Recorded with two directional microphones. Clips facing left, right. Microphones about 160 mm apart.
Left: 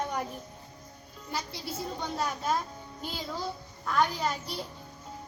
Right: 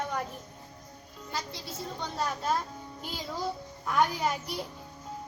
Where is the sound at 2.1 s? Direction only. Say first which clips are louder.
Right 1 dB; centre (ahead or behind).